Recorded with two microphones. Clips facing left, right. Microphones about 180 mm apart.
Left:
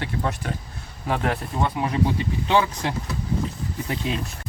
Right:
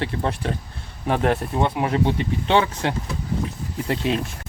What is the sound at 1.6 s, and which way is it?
Speech, 25° right (ahead or behind).